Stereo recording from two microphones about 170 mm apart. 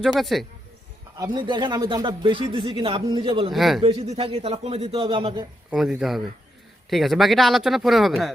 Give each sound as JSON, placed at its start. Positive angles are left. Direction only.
{"t": 0.0, "sound": "speech", "side_deg": 0}
{"t": 1.2, "sound": "speech", "side_deg": -25}
{"t": 3.5, "sound": "speech", "side_deg": 0}
{"t": 3.8, "sound": "a man's voice", "side_deg": -35}
{"t": 5.7, "sound": "speech", "side_deg": -5}